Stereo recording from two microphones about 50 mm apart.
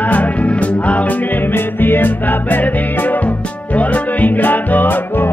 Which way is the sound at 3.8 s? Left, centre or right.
Left.